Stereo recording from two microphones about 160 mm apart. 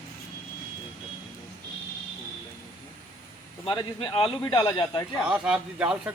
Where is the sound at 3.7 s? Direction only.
30° left (ahead or behind).